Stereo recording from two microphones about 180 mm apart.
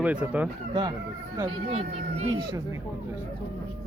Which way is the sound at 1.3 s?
30° right (ahead or behind).